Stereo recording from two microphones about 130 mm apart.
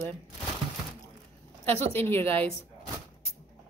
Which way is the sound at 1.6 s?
15° left (ahead or behind).